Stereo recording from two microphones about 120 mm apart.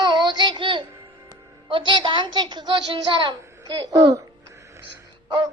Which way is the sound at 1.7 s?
45° right (ahead or behind).